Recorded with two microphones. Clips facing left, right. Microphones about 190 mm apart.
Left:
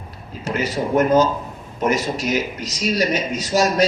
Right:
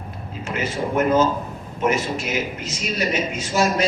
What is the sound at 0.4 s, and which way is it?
Speech, 40° left (ahead or behind).